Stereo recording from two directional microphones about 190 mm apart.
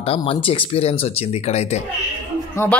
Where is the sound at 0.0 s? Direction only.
30° left (ahead or behind).